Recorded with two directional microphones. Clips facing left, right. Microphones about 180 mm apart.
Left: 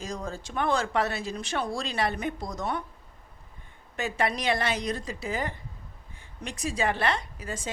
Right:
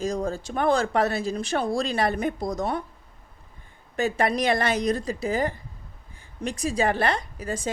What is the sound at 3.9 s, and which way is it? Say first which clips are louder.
A woman's voice: right 5 dB; 40° right (ahead or behind).